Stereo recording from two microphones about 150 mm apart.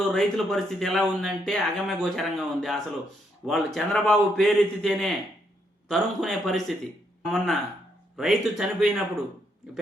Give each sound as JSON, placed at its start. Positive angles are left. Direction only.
{"t": 0.1, "sound": "speech", "side_deg": 0}